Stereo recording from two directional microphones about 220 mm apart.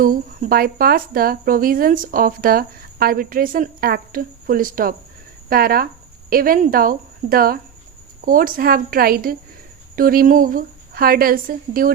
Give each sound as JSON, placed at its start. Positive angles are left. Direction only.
{"t": 0.0, "sound": "speech", "side_deg": -40}